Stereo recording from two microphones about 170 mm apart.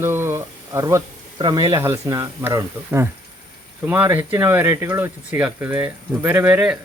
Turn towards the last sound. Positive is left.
turn(degrees=-10)  # may be behind; listen again after turning